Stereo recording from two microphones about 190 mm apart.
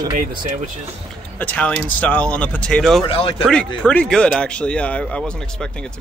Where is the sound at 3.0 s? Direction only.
30° left (ahead or behind).